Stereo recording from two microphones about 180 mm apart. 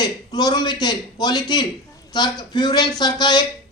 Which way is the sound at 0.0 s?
25° left (ahead or behind).